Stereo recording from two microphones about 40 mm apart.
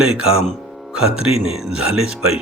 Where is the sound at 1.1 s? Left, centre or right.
Centre.